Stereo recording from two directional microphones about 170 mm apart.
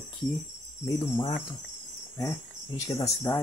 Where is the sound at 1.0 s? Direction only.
25° left (ahead or behind).